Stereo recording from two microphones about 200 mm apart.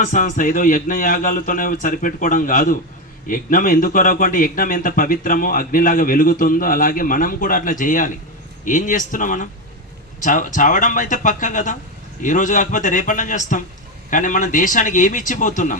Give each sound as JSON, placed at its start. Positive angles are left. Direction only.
{"t": 0.0, "sound": "a man's voice", "side_deg": 40}